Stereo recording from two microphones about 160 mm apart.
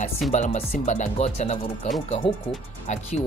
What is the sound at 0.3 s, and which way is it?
Speech, 45° left (ahead or behind).